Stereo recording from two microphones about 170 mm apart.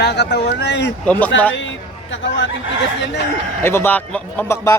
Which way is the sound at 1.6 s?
90° left.